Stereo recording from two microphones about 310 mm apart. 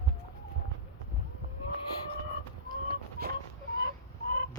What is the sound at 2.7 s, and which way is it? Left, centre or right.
Chicken, right.